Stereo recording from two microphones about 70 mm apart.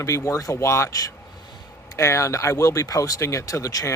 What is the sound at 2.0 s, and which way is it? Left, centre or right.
Speech, left.